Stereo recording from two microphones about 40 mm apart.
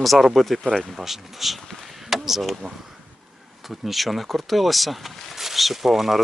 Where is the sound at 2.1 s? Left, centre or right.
Centre.